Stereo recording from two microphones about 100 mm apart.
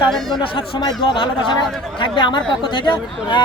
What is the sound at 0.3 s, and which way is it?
Speech, 60° left (ahead or behind).